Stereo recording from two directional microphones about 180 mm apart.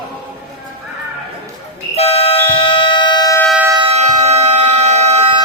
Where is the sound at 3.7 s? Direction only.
30° right (ahead or behind).